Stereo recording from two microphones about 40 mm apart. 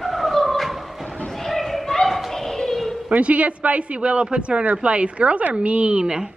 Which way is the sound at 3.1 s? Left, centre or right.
Right.